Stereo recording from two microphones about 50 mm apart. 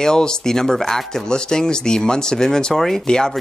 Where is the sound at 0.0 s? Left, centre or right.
Centre.